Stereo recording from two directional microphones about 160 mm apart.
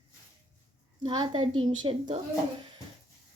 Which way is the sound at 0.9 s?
30° right (ahead or behind).